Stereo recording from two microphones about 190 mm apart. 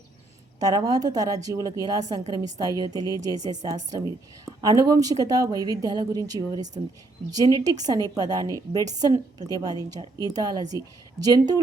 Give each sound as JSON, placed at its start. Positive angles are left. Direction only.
{"t": 0.6, "sound": "a woman's voice", "side_deg": -20}